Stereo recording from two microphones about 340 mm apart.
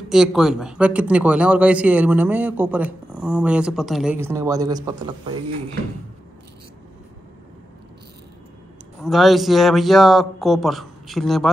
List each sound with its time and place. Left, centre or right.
0.1 s speech: centre
9.0 s speech: centre